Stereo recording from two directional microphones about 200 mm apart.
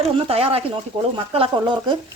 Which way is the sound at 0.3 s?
30° right (ahead or behind).